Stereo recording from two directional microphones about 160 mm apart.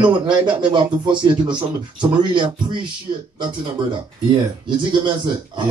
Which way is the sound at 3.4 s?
30° right (ahead or behind).